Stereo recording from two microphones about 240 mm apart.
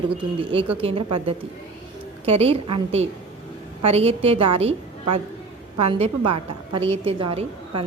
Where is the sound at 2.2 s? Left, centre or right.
Right.